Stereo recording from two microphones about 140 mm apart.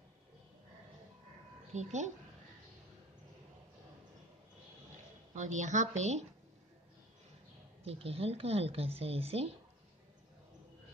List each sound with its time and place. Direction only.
1.7 s a woman's voice: 55° right (ahead or behind)
5.3 s a woman's voice: 60° right (ahead or behind)
7.8 s speech: 45° right (ahead or behind)